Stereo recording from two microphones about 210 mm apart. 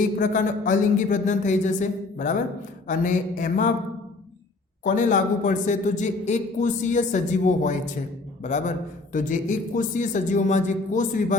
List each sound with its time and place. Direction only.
0.2 s a man's voice: 40° left (ahead or behind)
4.8 s a man's voice: 40° left (ahead or behind)